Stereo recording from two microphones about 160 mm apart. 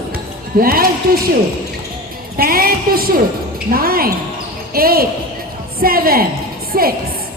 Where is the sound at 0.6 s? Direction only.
65° right (ahead or behind).